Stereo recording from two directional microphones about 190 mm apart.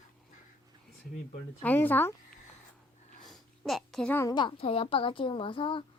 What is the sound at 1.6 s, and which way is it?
Speech, 10° left (ahead or behind).